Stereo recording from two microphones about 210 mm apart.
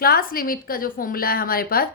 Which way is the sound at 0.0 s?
45° left (ahead or behind).